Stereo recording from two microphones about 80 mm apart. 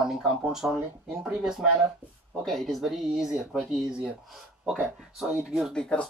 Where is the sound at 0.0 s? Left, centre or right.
Centre.